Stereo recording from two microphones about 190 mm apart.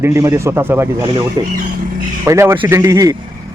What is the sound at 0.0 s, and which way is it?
A man's voice, 15° right (ahead or behind).